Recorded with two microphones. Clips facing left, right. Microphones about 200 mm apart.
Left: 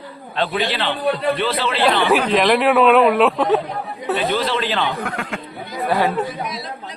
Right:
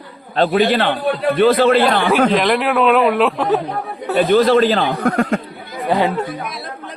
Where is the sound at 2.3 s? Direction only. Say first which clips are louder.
Left 1 dB; centre (ahead or behind).